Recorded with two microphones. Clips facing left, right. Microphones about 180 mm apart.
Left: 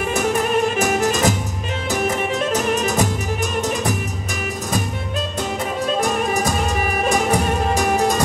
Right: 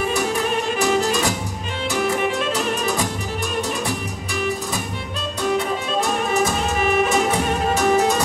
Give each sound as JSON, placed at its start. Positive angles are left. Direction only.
{"t": 0.7, "sound": "music", "side_deg": 45}